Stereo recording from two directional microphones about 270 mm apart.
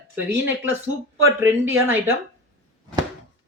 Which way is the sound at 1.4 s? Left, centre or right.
Centre.